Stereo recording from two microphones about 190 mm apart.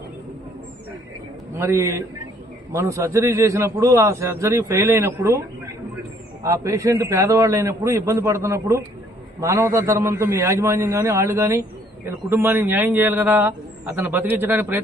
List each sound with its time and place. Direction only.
1.5 s a man's voice: 15° right (ahead or behind)